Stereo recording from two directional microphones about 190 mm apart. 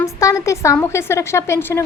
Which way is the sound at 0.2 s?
15° left (ahead or behind).